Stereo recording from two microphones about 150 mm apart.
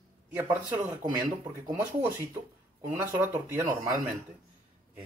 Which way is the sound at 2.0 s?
15° right (ahead or behind).